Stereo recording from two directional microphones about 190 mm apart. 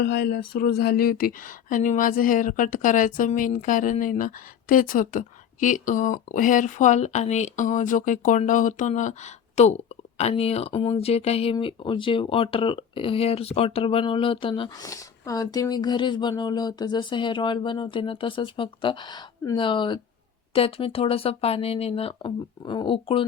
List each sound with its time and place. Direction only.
0.0 s speech: 60° left (ahead or behind); by 23.2 s 25° left (ahead or behind)